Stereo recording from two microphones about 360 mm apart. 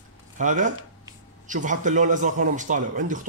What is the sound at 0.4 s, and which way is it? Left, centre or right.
Speech, right.